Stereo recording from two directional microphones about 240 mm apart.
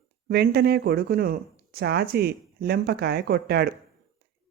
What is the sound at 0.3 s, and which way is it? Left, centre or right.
Speech, right.